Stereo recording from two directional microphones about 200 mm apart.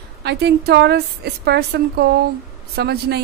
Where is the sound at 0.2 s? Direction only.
55° right (ahead or behind).